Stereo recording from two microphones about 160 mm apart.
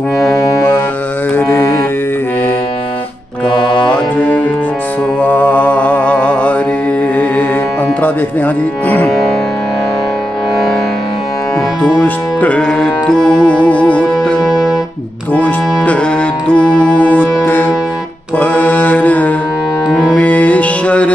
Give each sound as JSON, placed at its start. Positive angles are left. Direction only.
{"t": 1.3, "sound": "mantra", "side_deg": 15}
{"t": 3.8, "sound": "mantra", "side_deg": 10}
{"t": 8.0, "sound": "music", "side_deg": 10}
{"t": 11.8, "sound": "music", "side_deg": 10}
{"t": 18.4, "sound": "mantra", "side_deg": 10}
{"t": 19.9, "sound": "music", "side_deg": 5}